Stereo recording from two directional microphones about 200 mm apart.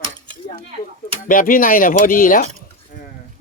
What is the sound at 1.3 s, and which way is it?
Speech, 45° left (ahead or behind).